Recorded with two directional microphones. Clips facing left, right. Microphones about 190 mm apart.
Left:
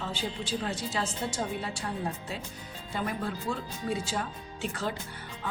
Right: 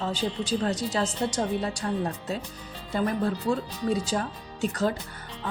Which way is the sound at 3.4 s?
40° right (ahead or behind).